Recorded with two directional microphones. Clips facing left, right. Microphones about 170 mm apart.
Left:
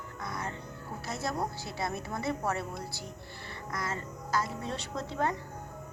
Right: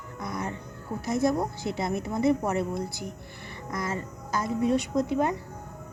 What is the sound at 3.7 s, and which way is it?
Music, 20° right (ahead or behind).